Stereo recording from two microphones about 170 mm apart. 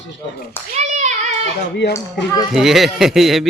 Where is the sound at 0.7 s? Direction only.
45° right (ahead or behind).